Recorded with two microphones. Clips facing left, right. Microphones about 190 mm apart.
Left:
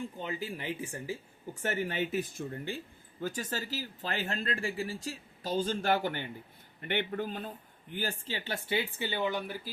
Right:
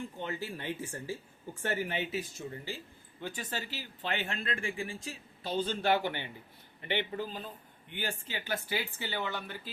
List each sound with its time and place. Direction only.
0.3 s speech: 10° left (ahead or behind)
1.9 s speech: 50° left (ahead or behind)
3.2 s a man's voice: 40° left (ahead or behind); by 7.5 s 55° left (ahead or behind)
7.9 s speech: 40° left (ahead or behind)
8.4 s speech: 20° left (ahead or behind)